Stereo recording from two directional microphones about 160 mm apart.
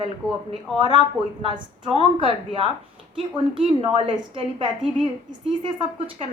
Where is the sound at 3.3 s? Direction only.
35° right (ahead or behind).